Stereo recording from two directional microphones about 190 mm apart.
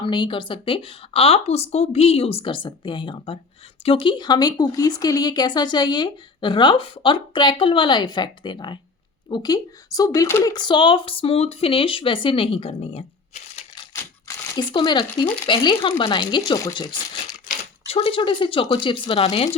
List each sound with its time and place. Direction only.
0.0 s speech: 25° left (ahead or behind)
13.9 s speech: 20° left (ahead or behind)